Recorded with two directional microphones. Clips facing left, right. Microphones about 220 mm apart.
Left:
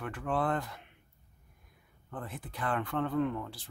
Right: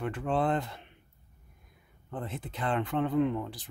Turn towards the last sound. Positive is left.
turn(degrees=-20)  # may be behind; listen again after turning